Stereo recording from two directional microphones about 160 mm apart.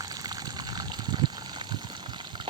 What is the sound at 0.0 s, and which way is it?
Water, 25° right (ahead or behind).